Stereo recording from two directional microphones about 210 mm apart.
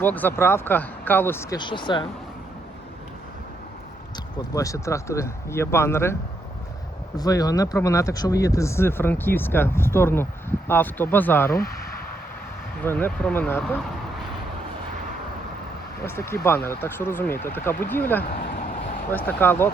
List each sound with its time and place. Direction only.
0.0 s speech: 10° left (ahead or behind)
4.5 s speech: 15° left (ahead or behind)
7.2 s speech: 15° left (ahead or behind)
11.5 s speech: 45° left (ahead or behind)
12.8 s speech: 10° left (ahead or behind)
13.6 s a sound: 5° left (ahead or behind)
16.0 s speech: 10° left (ahead or behind)